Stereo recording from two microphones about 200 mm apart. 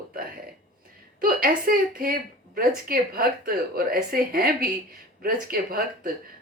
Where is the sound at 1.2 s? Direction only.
45° right (ahead or behind).